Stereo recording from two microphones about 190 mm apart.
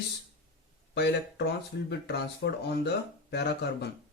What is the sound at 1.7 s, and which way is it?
Speech, 65° left (ahead or behind).